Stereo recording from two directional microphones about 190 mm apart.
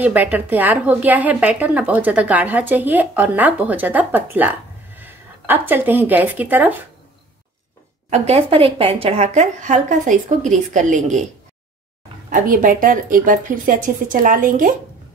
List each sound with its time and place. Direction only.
0.0 s speech: 10° right (ahead or behind)
8.1 s a woman's voice: 30° right (ahead or behind)
12.3 s a woman's voice: 45° right (ahead or behind)